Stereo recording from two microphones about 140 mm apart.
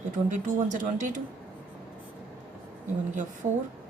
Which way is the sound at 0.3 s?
65° right (ahead or behind).